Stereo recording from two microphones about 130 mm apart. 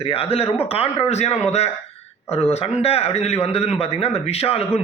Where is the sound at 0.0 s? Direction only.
50° left (ahead or behind).